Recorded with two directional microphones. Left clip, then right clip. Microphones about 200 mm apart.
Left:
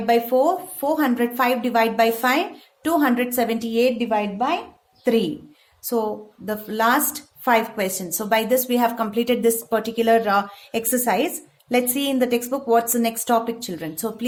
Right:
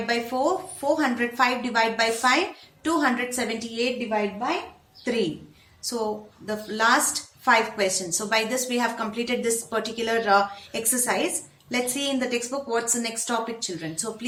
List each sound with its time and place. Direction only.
0.0 s speech: 50° left (ahead or behind)
6.4 s speech: 50° left (ahead or behind)